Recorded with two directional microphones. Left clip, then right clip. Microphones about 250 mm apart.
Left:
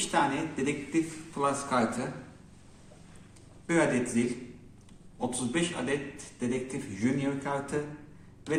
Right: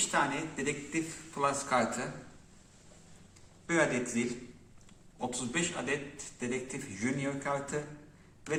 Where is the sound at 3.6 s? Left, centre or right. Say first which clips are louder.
Left 3 dB; centre.